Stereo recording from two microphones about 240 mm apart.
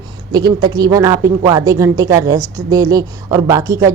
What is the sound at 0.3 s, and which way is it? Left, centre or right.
A woman's voice, centre.